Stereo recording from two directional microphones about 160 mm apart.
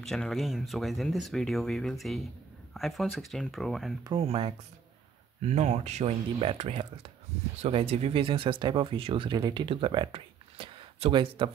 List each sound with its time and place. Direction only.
0.0 s speech: centre (ahead or behind)
4.0 s speech: 35° right (ahead or behind)